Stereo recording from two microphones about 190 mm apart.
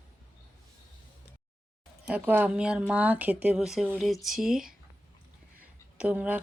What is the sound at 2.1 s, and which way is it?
Speech, 10° right (ahead or behind).